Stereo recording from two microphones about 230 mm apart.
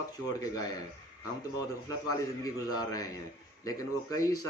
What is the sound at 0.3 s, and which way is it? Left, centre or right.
Speech, centre.